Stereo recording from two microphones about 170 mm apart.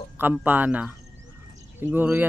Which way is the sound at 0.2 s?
10° right (ahead or behind).